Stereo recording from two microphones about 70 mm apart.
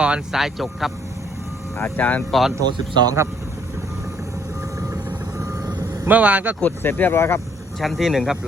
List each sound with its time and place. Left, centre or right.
0.0 s speech: centre
0.3 s speech: centre
1.8 s speech: left
2.6 s speech: right
6.1 s speech: right
6.6 s speech: left
7.8 s speech: centre